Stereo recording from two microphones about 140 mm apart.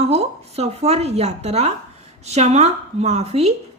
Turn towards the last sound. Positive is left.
turn(degrees=-50)  # may be behind; listen again after turning